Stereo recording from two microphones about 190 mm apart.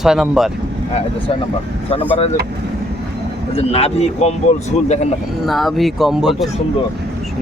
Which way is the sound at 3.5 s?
30° left (ahead or behind).